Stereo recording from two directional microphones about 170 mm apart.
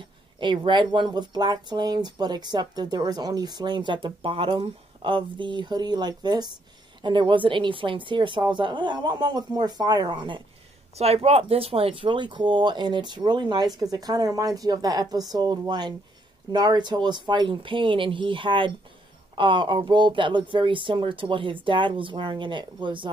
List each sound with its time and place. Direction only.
0.4 s speech: 30° right (ahead or behind)